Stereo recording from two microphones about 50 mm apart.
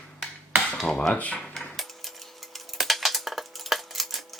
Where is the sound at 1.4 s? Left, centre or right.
Centre.